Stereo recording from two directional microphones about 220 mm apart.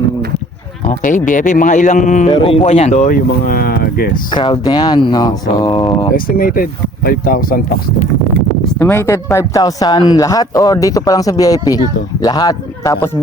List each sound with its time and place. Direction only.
0.9 s speech: 35° left (ahead or behind)
4.3 s speech: 20° left (ahead or behind)
6.1 s speech: 40° left (ahead or behind)
8.8 s a man's voice: 10° left (ahead or behind)